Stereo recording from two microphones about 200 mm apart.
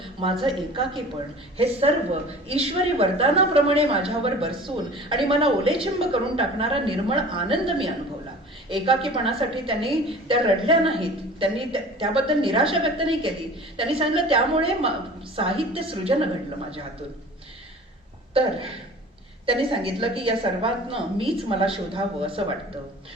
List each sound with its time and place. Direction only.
0.0 s a sound: 25° right (ahead or behind)
0.4 s a woman's voice: 25° right (ahead or behind)
19.5 s a woman's voice: 25° right (ahead or behind)